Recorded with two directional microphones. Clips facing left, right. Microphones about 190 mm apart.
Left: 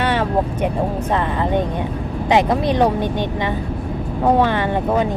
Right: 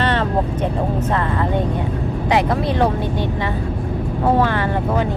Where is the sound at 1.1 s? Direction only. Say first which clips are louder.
Left 3 dB; 20° left (ahead or behind).